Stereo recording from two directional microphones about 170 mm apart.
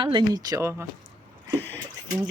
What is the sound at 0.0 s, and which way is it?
Speech, 25° right (ahead or behind).